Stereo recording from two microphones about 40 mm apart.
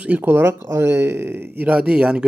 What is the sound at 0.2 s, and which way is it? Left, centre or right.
Speech, right.